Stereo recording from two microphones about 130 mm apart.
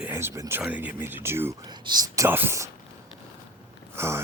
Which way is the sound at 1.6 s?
35° right (ahead or behind).